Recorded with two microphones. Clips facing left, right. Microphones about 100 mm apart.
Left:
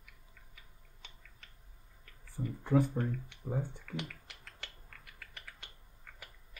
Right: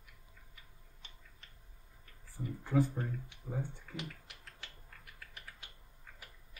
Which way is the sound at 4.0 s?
70° left (ahead or behind).